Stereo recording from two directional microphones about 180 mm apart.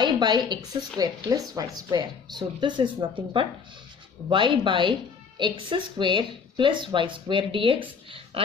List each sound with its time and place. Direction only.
0.0 s a woman's voice: 25° right (ahead or behind)